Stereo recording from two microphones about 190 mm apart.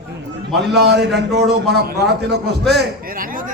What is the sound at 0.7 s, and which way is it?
A man's voice, 60° right (ahead or behind).